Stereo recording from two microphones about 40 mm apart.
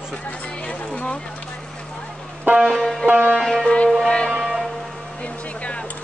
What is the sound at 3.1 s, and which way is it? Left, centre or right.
Music, right.